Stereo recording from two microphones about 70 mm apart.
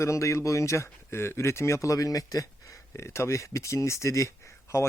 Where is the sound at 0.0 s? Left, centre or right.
Left.